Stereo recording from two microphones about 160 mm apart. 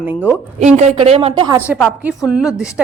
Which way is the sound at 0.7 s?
40° right (ahead or behind).